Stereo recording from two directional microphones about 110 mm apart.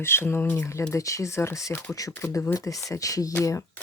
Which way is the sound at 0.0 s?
20° left (ahead or behind).